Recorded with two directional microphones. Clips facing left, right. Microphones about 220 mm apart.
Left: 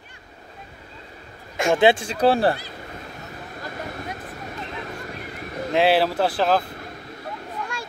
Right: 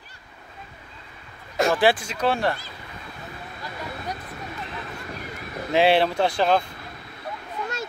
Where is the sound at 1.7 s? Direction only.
20° left (ahead or behind).